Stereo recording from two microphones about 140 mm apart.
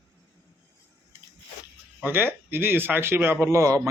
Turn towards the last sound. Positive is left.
turn(degrees=-20)  # may be behind; listen again after turning